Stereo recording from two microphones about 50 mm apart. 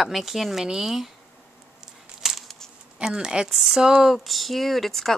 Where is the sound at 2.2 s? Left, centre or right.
Centre.